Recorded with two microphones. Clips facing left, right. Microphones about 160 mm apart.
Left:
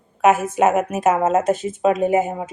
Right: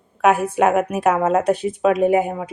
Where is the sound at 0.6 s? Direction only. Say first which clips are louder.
Even; 5° left (ahead or behind).